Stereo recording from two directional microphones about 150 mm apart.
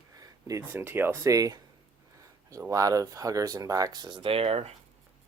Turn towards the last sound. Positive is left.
turn(degrees=-40)  # may be behind; listen again after turning